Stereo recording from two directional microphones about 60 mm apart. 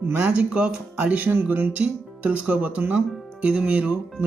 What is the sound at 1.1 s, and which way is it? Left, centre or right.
Speech, right.